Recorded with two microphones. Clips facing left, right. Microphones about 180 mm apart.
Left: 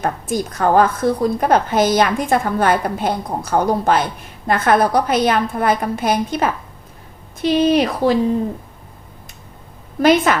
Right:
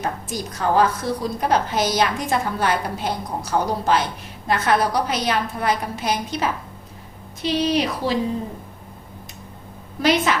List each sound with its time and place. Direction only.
0.0 s a woman's voice: 55° left (ahead or behind)
10.0 s a woman's voice: 50° left (ahead or behind)